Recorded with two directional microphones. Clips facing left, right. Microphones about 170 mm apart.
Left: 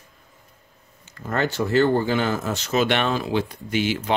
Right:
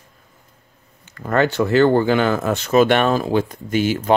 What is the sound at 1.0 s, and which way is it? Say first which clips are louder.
Speech: right 6 dB; 60° right (ahead or behind).